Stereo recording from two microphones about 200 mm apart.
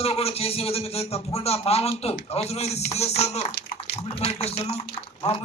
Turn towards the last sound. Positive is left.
turn(degrees=35)  # may be behind; listen again after turning